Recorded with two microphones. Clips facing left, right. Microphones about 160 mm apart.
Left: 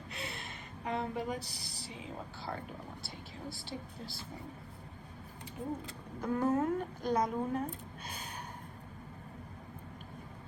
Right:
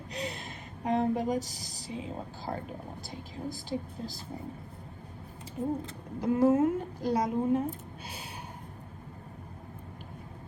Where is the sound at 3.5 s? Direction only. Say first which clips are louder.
Right 8 dB; 40° right (ahead or behind).